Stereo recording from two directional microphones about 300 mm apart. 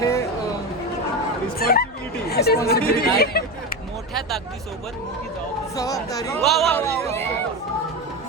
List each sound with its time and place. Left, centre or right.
0.0 s music: centre
1.5 s speech: left
5.7 s speech: centre
6.4 s speech: centre